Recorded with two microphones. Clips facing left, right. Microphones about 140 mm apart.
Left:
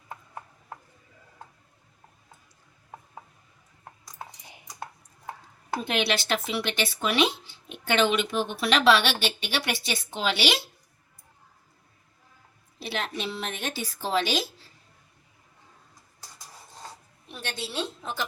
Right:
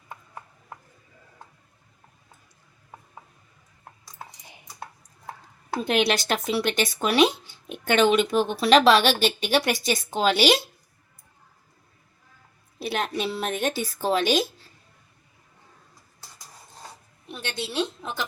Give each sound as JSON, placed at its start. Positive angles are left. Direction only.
{"t": 5.8, "sound": "a woman's voice", "side_deg": -40}
{"t": 12.8, "sound": "a woman's voice", "side_deg": -50}